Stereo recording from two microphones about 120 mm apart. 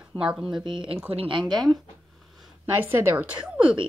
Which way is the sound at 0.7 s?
45° right (ahead or behind).